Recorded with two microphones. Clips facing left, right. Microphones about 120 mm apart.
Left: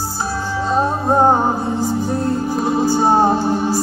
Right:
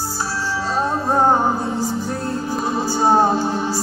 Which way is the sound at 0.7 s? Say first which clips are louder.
Left 4 dB; 20° left (ahead or behind).